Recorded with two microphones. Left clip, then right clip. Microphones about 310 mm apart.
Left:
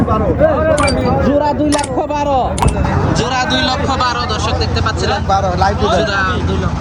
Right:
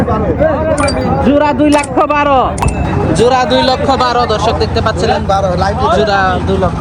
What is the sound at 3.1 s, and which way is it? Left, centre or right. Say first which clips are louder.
Speech: right 8 dB; centre.